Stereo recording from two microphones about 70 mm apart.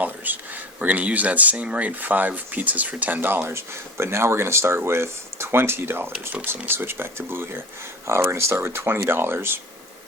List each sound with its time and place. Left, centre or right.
0.0 s speech: right